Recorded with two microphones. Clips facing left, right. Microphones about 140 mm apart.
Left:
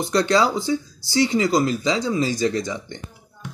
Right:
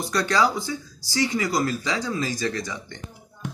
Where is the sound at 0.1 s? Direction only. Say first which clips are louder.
Left 3 dB; 20° left (ahead or behind).